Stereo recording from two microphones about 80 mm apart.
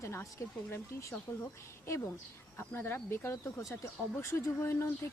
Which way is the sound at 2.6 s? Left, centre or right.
Left.